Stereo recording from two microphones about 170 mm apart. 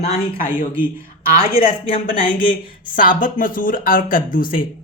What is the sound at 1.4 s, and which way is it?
Speech, 55° left (ahead or behind).